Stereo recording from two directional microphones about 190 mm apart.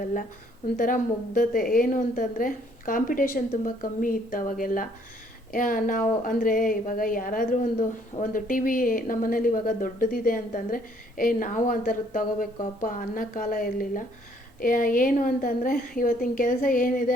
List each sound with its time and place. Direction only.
0.0 s a woman's voice: 45° left (ahead or behind)